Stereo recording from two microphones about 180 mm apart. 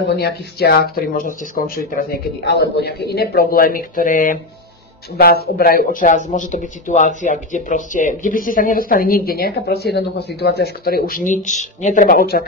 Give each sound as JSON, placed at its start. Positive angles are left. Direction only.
{"t": 0.1, "sound": "speech", "side_deg": 60}